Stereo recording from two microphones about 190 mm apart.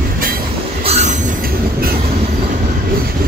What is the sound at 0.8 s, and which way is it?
Train, 35° right (ahead or behind).